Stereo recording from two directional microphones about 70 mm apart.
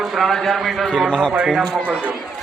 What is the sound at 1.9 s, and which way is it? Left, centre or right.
Speech, centre.